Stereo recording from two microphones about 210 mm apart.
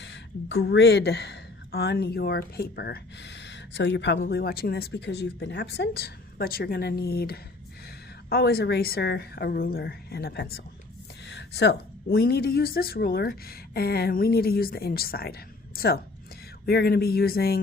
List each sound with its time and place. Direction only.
0.0 s a woman's voice: 60° left (ahead or behind)